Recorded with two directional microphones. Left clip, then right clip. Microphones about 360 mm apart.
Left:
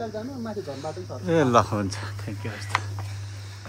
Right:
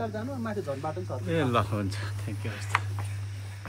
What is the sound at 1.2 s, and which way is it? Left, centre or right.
Speech, centre.